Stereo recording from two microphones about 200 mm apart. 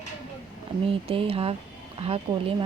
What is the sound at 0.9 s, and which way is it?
A woman's voice, 25° right (ahead or behind).